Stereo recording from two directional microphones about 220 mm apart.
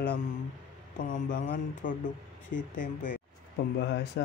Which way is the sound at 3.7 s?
50° left (ahead or behind).